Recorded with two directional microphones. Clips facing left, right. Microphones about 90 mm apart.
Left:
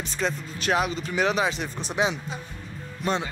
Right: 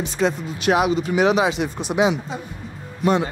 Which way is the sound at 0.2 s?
45° right (ahead or behind).